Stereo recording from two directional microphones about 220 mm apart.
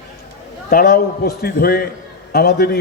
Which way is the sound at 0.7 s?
45° left (ahead or behind).